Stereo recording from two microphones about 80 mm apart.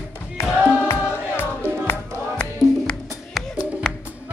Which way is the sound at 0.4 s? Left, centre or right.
Left.